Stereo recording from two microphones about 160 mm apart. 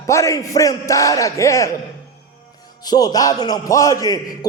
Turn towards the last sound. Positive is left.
turn(degrees=20)  # may be behind; listen again after turning